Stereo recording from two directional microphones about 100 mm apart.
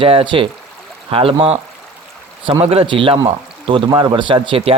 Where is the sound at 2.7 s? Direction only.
65° right (ahead or behind).